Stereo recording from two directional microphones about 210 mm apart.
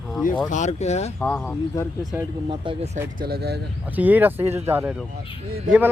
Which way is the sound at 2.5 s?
25° right (ahead or behind).